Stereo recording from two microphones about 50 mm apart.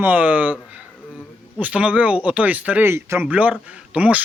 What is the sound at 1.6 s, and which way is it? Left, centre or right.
Speech, right.